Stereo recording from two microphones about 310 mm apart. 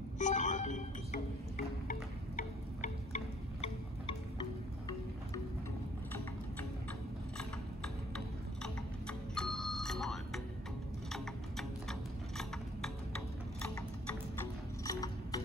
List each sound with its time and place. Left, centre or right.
0.2 s music: left
8.6 s doorbell: centre
11.1 s a sound: centre
14.4 s music: centre